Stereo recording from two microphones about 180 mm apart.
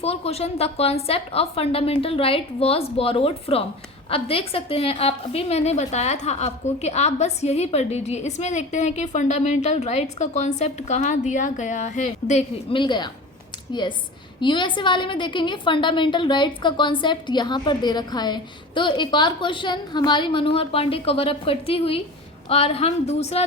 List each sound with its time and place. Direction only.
0.0 s a woman's voice: 35° left (ahead or behind)